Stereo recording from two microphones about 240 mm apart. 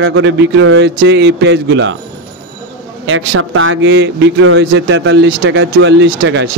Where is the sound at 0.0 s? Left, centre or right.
Right.